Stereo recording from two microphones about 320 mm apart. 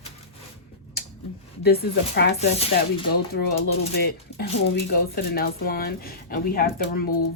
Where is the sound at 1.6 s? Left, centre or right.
Left.